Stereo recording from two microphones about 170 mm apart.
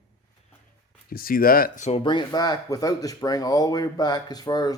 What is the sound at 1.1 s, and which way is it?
Speech, 60° left (ahead or behind).